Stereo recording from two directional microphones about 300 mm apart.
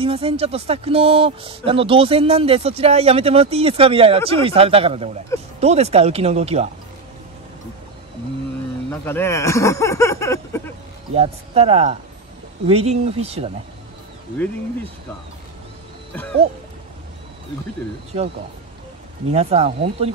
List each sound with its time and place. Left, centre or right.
0.0 s speech: centre
8.9 s speech: centre
11.1 s speech: centre
19.3 s speech: centre